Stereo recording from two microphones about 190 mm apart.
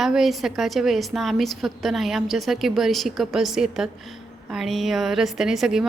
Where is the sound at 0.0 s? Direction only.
Centre (ahead or behind).